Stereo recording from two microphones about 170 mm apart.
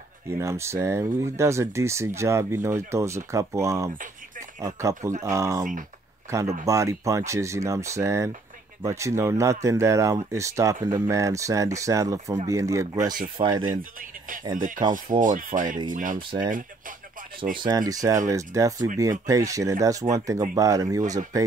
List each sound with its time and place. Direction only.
0.3 s speech: 15° right (ahead or behind)
13.7 s speech: 55° right (ahead or behind)
14.8 s speech: 25° right (ahead or behind)
15.1 s speech: 50° right (ahead or behind)
17.6 s speech: 25° right (ahead or behind)